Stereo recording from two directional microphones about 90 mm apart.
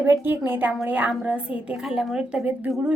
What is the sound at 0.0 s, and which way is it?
A woman's voice, 25° right (ahead or behind).